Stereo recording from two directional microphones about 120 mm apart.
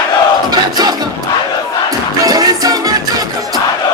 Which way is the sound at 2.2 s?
30° right (ahead or behind).